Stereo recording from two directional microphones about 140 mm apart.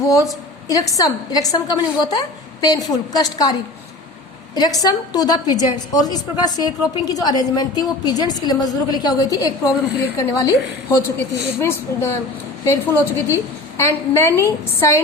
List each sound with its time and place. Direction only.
0.0 s a woman's voice: 25° left (ahead or behind)